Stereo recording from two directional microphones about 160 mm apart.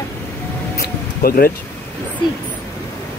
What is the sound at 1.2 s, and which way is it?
Speech, 70° left (ahead or behind).